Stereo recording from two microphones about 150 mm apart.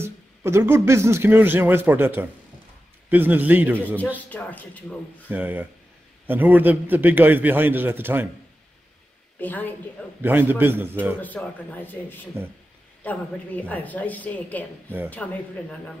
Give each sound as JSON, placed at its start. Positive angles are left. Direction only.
{"t": 0.0, "sound": "a man's voice", "side_deg": -15}
{"t": 3.7, "sound": "a woman's voice", "side_deg": 10}
{"t": 5.3, "sound": "a man's voice", "side_deg": -10}
{"t": 9.4, "sound": "a woman's voice", "side_deg": 10}
{"t": 10.2, "sound": "a man's voice", "side_deg": -15}
{"t": 11.1, "sound": "a woman's voice", "side_deg": 10}